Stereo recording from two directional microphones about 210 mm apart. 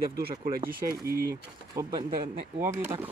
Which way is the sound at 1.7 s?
20° right (ahead or behind).